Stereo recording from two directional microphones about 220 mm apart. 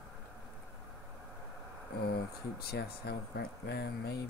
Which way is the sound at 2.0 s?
45° left (ahead or behind).